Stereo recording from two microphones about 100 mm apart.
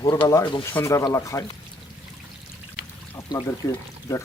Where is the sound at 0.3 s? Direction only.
35° left (ahead or behind).